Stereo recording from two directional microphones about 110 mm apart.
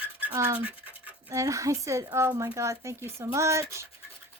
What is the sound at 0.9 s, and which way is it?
Scratch, 15° right (ahead or behind).